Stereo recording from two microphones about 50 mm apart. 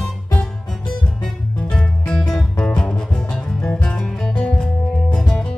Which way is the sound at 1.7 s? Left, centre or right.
Centre.